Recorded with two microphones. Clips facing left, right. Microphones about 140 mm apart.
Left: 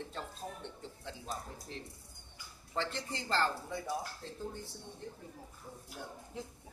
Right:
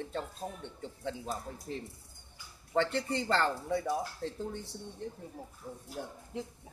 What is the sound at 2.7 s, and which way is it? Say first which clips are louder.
Speech: right 8 dB; 65° right (ahead or behind).